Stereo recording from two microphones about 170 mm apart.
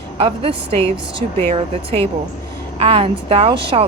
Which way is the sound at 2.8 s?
35° right (ahead or behind).